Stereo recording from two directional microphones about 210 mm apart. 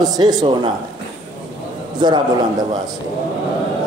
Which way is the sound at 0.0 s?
20° right (ahead or behind).